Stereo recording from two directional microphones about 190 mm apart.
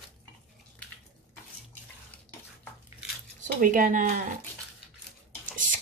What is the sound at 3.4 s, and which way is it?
Speech, 45° right (ahead or behind).